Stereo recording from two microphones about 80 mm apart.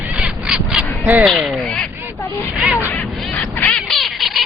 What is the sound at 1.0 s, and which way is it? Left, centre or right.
Crow, right.